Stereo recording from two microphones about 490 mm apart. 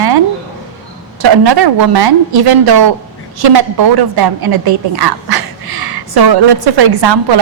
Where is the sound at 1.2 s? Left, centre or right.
Right.